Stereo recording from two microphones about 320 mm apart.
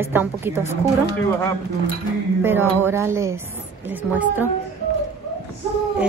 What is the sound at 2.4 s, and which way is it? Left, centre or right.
Speech, centre.